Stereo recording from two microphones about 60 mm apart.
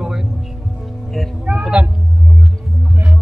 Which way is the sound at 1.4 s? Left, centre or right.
Centre.